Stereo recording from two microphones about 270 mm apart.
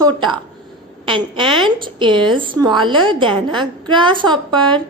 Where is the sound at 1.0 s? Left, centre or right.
Centre.